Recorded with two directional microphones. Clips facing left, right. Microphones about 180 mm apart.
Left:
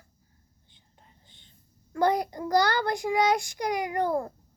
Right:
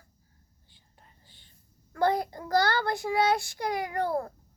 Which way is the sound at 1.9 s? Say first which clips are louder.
Left 2 dB; 15° left (ahead or behind).